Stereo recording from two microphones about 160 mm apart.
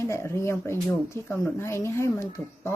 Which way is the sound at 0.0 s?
15° left (ahead or behind).